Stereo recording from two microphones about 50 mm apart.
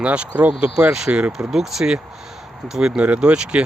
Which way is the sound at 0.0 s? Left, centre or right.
Right.